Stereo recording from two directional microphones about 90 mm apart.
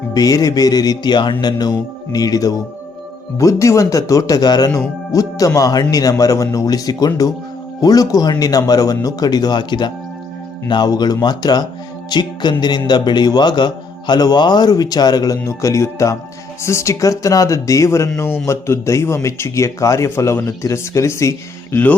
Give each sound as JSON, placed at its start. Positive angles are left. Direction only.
{"t": 0.1, "sound": "a man's voice", "side_deg": 45}
{"t": 15.4, "sound": "a man's voice", "side_deg": 35}